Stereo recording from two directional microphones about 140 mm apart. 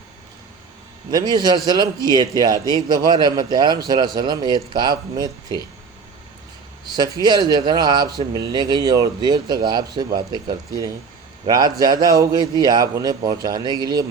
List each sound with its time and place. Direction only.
1.1 s a man's voice: 30° right (ahead or behind)
6.9 s a man's voice: 30° right (ahead or behind)